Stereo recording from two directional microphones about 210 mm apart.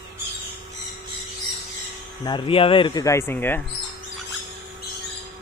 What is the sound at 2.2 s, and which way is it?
Speech, 25° left (ahead or behind).